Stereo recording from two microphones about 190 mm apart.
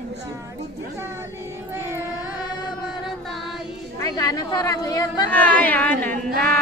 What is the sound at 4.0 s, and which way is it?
A woman's voice, 20° left (ahead or behind).